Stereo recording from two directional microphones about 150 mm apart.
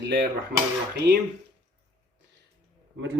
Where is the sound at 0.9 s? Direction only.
90° right.